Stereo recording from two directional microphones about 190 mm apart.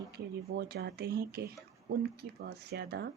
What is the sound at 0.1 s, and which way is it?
Speech, 60° right (ahead or behind).